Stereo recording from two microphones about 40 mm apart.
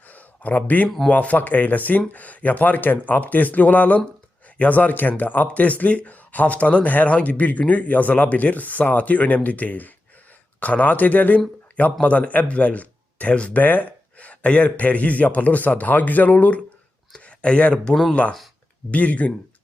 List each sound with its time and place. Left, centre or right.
0.1 s a sound: left
1.1 s speech: left
11.8 s speech: left
13.6 s speech: left